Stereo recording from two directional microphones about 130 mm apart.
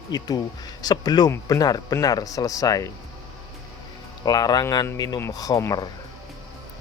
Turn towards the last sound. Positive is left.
turn(degrees=30)  # may be behind; listen again after turning